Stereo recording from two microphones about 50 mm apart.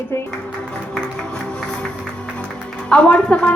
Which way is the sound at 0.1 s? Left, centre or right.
Left.